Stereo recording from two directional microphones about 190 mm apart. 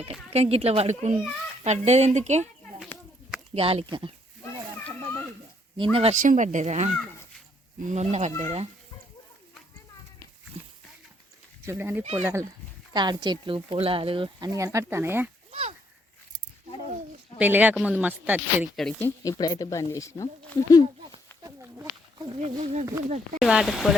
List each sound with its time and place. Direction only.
0.0 s speech: 30° right (ahead or behind)
3.5 s speech: 30° right (ahead or behind)
4.4 s children playing: 10° left (ahead or behind)
5.7 s speech: 30° right (ahead or behind)
11.6 s speech: 15° right (ahead or behind)
14.3 s speech: 15° right (ahead or behind)
17.3 s speech: 10° right (ahead or behind)
18.9 s speech: 10° left (ahead or behind)
21.4 s a sound: 15° right (ahead or behind)
22.3 s speech: 30° right (ahead or behind)
23.4 s speech: centre (ahead or behind)